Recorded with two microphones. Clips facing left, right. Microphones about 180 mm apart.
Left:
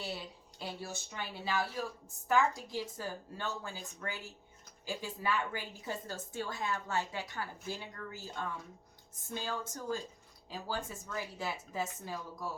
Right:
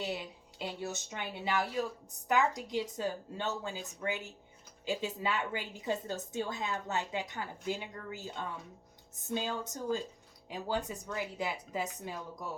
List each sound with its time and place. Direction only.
0.0 s a woman's voice: 20° right (ahead or behind)